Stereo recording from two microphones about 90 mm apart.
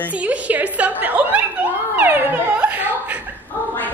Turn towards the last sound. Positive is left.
turn(degrees=-20)  # may be behind; listen again after turning